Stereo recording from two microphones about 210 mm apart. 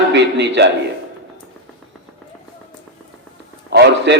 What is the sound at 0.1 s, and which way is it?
Speech, 55° right (ahead or behind).